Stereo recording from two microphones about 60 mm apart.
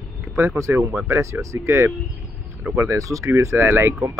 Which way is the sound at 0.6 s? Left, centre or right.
Right.